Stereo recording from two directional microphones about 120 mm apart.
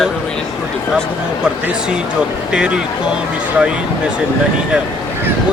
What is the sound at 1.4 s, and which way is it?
Speech, 5° right (ahead or behind).